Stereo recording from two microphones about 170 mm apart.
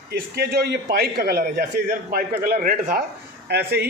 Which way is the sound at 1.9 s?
55° right (ahead or behind).